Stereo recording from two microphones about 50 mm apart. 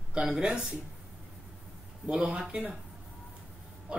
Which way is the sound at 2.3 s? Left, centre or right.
Centre.